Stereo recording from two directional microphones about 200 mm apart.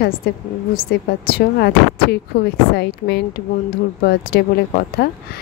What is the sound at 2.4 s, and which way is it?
A woman's voice, 55° left (ahead or behind).